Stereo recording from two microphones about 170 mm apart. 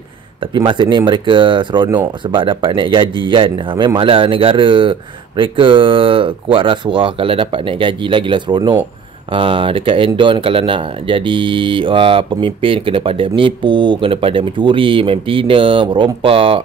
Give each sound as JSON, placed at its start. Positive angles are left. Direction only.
{"t": 0.6, "sound": "speech", "side_deg": -25}